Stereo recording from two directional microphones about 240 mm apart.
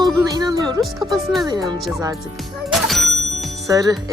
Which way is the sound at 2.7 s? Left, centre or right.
Centre.